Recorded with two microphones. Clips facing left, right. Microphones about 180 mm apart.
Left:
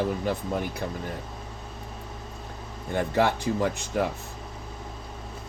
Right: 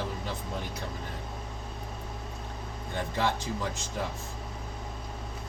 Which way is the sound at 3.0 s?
60° left (ahead or behind).